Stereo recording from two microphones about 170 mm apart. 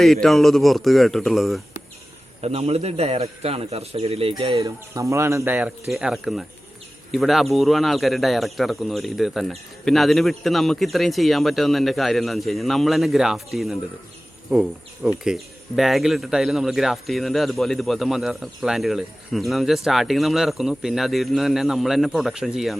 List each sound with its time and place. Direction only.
0.0 s speech: centre (ahead or behind)
2.4 s a man's voice: 35° right (ahead or behind)
5.0 s speech: 15° right (ahead or behind)